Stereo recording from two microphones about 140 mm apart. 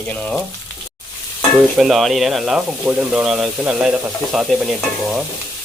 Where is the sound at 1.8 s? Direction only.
Centre (ahead or behind).